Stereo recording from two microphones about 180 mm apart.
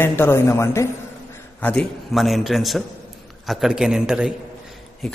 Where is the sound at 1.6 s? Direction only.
5° left (ahead or behind).